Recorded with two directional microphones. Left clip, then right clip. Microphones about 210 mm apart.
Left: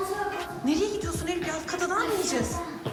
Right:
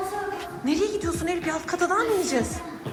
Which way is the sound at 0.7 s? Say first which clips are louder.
Right 3 dB; 10° left (ahead or behind).